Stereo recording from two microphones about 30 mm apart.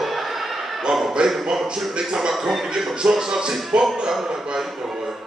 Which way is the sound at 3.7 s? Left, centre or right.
Right.